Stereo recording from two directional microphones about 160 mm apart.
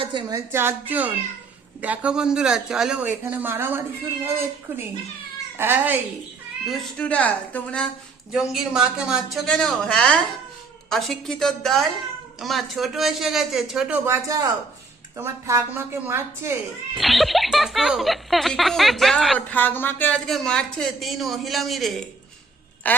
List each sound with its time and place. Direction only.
0.0 s a woman's voice: 30° right (ahead or behind)
0.3 s a man's voice: 15° right (ahead or behind)
5.5 s a man's voice: 15° right (ahead or behind)
6.7 s speech: 5° left (ahead or behind)
8.3 s a man's voice: 5° right (ahead or behind)
16.9 s speech: centre (ahead or behind)